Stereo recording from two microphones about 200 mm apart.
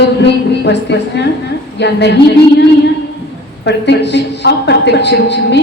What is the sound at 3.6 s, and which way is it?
A woman's voice, 60° left (ahead or behind).